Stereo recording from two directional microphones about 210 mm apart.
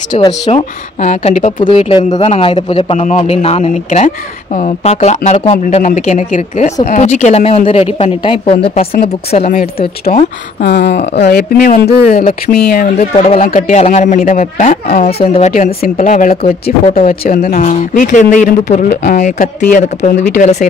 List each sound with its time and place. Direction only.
0.3 s a man's voice: 30° left (ahead or behind)
5.8 s a man's voice: 35° left (ahead or behind)
10.6 s a sound: 50° left (ahead or behind)
12.9 s a man's voice: 30° left (ahead or behind); by 15.2 s 45° left (ahead or behind)
15.3 s a man's voice: 35° left (ahead or behind)